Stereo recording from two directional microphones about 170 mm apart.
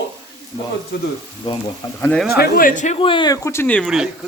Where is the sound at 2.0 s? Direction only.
5° left (ahead or behind).